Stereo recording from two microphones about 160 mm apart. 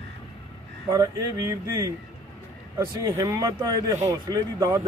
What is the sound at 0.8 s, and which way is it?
Speech, 25° right (ahead or behind).